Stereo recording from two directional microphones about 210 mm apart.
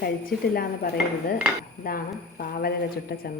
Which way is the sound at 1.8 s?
45° left (ahead or behind).